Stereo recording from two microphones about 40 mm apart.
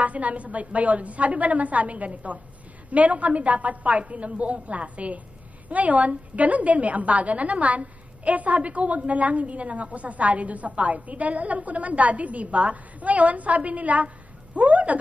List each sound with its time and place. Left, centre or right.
0.0 s a woman's voice: right